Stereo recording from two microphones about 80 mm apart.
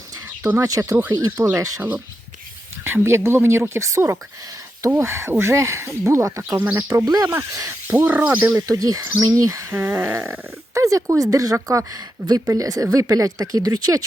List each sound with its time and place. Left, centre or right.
0.4 s speech: right
0.7 s speech: right
2.8 s speech: right
7.3 s speech: right
7.9 s a sound: right
8.5 s speech: right
9.0 s speech: right
10.2 s a sound: right
11.2 s speech: right
11.9 s speech: right